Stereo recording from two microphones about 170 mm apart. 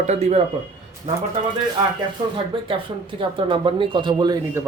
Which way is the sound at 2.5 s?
30° right (ahead or behind).